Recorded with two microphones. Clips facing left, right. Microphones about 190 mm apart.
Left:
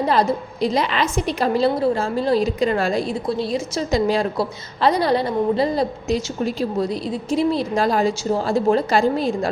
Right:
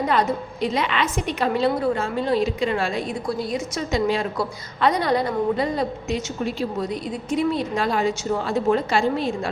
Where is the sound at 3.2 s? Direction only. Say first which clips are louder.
Left 3 dB; 25° left (ahead or behind).